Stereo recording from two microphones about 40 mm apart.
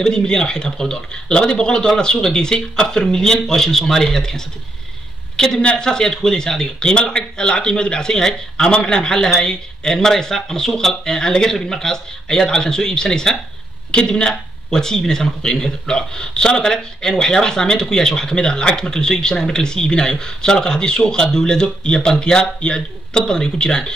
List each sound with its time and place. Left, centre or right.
0.0 s speech: centre